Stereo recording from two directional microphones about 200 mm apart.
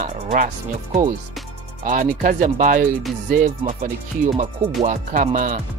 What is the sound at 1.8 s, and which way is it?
Speech, 40° right (ahead or behind).